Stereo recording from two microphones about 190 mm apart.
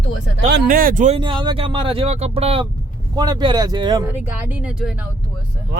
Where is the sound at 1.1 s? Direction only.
25° right (ahead or behind).